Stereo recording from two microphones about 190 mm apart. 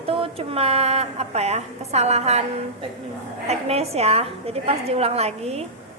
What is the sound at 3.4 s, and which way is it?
A woman's voice, 35° right (ahead or behind).